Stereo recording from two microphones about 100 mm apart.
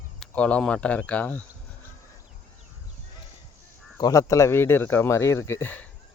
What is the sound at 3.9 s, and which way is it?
Speech, 40° left (ahead or behind).